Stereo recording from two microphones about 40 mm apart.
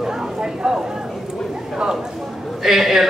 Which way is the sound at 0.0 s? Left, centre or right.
Centre.